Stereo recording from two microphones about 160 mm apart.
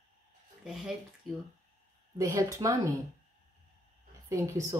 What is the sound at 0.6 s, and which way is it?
Speech, centre (ahead or behind).